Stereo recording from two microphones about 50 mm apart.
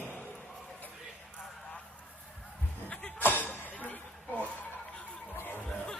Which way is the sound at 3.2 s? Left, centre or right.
Left.